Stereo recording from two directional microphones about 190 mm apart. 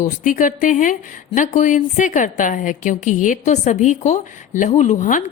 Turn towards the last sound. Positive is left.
turn(degrees=45)  # may be behind; listen again after turning